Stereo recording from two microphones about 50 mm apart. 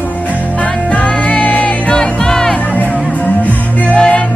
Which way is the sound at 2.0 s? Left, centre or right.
Centre.